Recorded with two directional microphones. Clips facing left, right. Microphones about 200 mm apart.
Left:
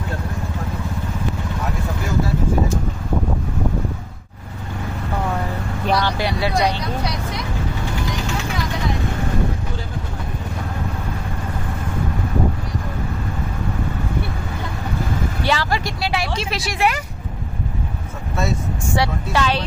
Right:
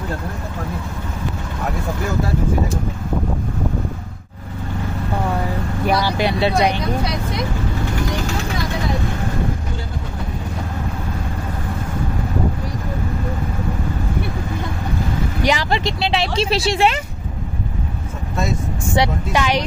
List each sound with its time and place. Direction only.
5.9 s vehicle: 10° right (ahead or behind)
6.2 s speech: 20° right (ahead or behind)
15.4 s speech: 15° right (ahead or behind)
18.9 s a woman's voice: 15° right (ahead or behind)